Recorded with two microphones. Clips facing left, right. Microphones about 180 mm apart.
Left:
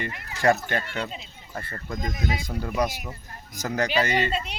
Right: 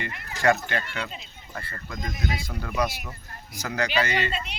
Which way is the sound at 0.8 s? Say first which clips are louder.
Left 2 dB; 25° left (ahead or behind).